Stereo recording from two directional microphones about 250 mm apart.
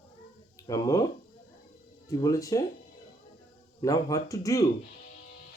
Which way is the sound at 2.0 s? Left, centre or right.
Centre.